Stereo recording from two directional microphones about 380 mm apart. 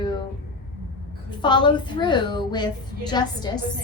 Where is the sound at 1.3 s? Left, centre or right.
Centre.